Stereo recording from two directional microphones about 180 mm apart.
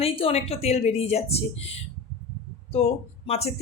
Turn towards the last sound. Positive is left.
turn(degrees=35)  # may be behind; listen again after turning